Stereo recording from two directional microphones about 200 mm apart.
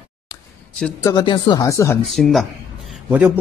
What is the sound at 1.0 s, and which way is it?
Speech, 20° left (ahead or behind).